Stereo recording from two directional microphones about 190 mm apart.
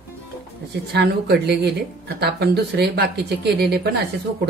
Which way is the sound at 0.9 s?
60° right (ahead or behind).